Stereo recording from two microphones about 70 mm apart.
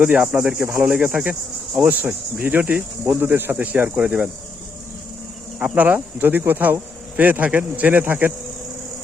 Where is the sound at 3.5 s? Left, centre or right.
Right.